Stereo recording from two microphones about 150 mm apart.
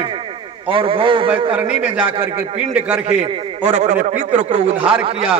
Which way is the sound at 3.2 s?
45° right (ahead or behind).